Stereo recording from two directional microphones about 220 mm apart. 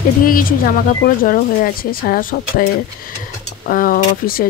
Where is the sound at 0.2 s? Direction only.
40° left (ahead or behind).